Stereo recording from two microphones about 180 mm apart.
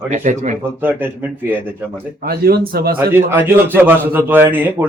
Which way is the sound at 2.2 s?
60° right (ahead or behind).